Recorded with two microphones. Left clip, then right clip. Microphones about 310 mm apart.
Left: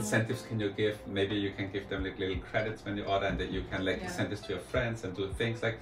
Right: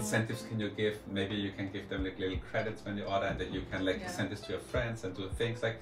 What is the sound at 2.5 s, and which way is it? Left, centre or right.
Speech, centre.